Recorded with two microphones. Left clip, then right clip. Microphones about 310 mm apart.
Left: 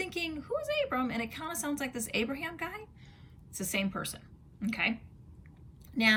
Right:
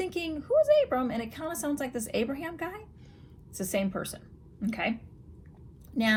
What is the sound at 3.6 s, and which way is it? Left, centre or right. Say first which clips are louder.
A woman's voice: right 3 dB; centre.